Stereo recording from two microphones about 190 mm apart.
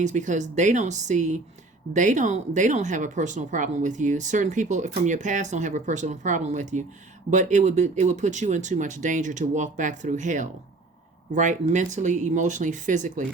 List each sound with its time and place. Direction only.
0.0 s speech: 40° right (ahead or behind)